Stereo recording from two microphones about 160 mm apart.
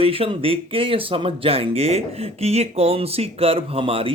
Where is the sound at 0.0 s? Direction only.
35° right (ahead or behind).